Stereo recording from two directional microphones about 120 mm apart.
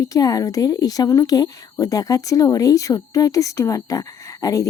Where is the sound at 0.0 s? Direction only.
30° left (ahead or behind).